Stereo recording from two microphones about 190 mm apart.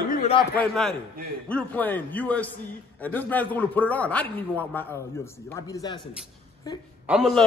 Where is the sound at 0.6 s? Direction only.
Centre (ahead or behind); by 5.9 s 20° left (ahead or behind).